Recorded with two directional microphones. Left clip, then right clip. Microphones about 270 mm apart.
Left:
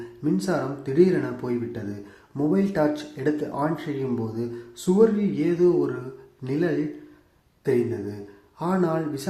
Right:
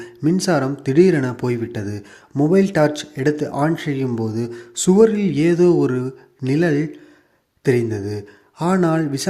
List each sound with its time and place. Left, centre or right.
0.2 s speech: right